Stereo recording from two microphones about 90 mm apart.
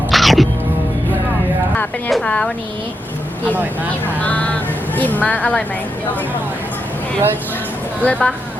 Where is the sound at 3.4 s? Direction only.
20° right (ahead or behind).